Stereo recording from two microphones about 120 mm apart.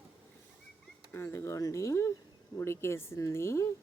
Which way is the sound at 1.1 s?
20° left (ahead or behind).